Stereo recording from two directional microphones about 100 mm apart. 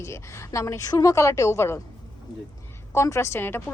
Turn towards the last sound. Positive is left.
turn(degrees=25)  # may be behind; listen again after turning